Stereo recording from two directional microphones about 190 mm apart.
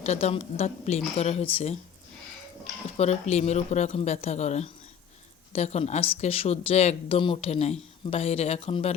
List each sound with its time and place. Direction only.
0.0 s speech: 35° left (ahead or behind)
3.0 s speech: 35° left (ahead or behind)